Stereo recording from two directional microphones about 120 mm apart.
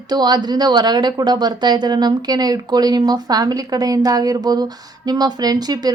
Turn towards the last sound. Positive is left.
turn(degrees=-35)  # may be behind; listen again after turning